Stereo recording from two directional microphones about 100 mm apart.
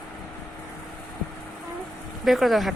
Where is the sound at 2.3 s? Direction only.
Centre (ahead or behind).